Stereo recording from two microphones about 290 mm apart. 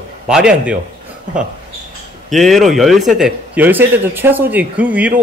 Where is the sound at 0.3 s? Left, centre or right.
Centre.